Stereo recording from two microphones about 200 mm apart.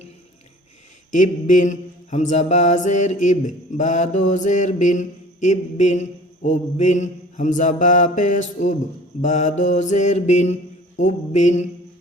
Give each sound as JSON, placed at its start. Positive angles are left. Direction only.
{"t": 1.1, "sound": "mantra", "side_deg": 40}